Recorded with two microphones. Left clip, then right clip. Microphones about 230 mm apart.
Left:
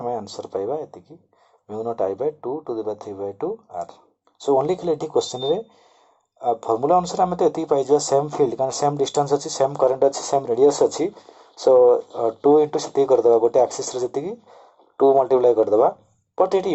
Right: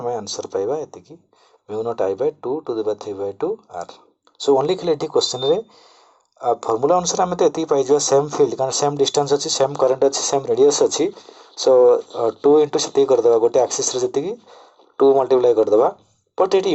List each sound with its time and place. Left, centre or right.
0.3 s speech: right